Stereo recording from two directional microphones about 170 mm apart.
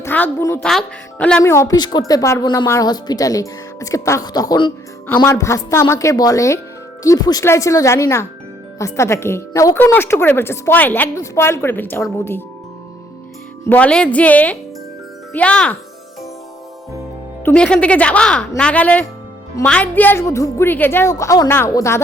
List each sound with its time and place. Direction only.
0.0 s a woman's voice: 10° left (ahead or behind)
13.7 s a woman's voice: 10° left (ahead or behind)
17.4 s a woman's voice: 5° left (ahead or behind)